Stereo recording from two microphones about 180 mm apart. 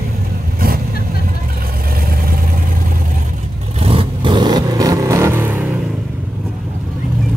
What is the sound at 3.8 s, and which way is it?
Vehicle, 30° right (ahead or behind).